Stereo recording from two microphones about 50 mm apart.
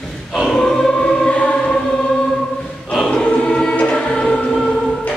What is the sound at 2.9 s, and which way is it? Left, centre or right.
Choir, centre.